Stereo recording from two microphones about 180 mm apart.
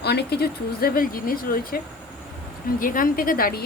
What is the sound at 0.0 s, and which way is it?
A woman's voice, 65° left (ahead or behind).